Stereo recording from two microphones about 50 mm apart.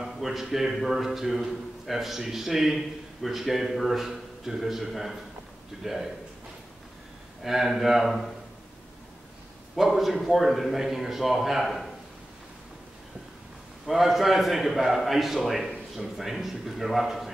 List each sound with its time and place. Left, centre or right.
0.0 s a man's voice: centre
7.4 s a man's voice: centre
9.8 s a man's voice: centre
13.8 s a man's voice: centre